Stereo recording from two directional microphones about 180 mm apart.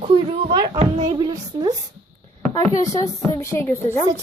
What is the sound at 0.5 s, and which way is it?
A woman's voice, 25° right (ahead or behind).